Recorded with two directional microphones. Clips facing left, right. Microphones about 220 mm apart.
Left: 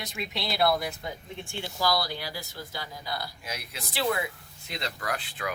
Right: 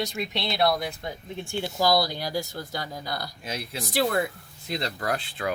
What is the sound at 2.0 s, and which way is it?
Speech, 45° right (ahead or behind).